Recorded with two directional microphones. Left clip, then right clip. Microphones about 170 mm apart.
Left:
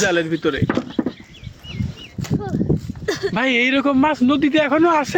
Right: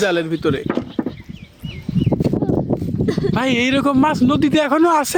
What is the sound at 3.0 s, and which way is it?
Speech, 60° left (ahead or behind).